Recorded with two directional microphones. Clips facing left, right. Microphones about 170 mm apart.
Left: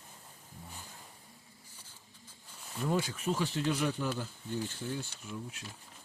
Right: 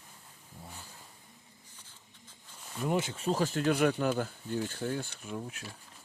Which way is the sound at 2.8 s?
20° right (ahead or behind).